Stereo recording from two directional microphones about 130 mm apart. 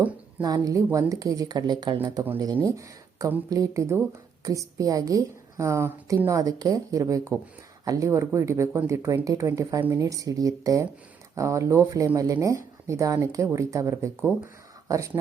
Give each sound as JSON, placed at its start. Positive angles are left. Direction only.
{"t": 0.4, "sound": "speech", "side_deg": -30}